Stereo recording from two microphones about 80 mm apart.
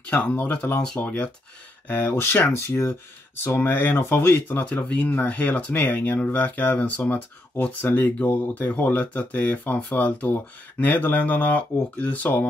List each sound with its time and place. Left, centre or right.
0.1 s speech: centre